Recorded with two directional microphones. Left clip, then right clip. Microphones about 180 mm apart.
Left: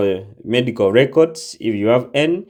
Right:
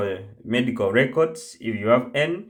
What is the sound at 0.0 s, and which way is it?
Speech, 30° left (ahead or behind).